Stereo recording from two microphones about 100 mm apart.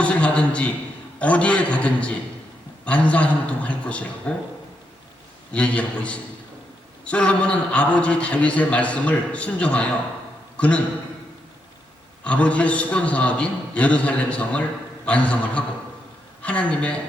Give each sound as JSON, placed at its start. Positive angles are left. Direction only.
{"t": 0.0, "sound": "a sound", "side_deg": 10}
{"t": 1.2, "sound": "a man's voice", "side_deg": 15}
{"t": 5.5, "sound": "a man's voice", "side_deg": 10}
{"t": 12.2, "sound": "a man's voice", "side_deg": 15}